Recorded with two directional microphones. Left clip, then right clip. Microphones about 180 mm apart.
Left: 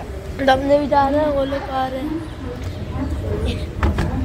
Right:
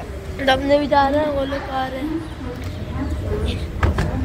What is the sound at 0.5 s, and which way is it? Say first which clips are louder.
A woman's voice: left 1 dB; 10° left (ahead or behind).